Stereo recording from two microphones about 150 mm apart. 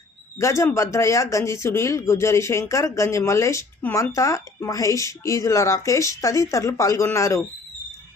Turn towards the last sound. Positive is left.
turn(degrees=20)  # may be behind; listen again after turning